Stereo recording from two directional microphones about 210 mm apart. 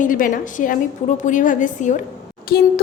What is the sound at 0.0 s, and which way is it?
A woman's voice, 40° left (ahead or behind).